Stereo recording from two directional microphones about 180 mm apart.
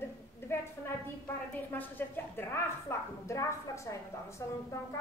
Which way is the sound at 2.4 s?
15° left (ahead or behind).